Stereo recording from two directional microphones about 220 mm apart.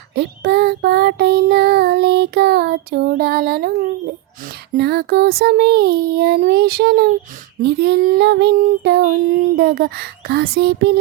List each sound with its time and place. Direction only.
0.1 s child singing: 50° right (ahead or behind)